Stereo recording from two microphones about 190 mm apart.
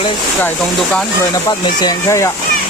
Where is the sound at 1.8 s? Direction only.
15° left (ahead or behind).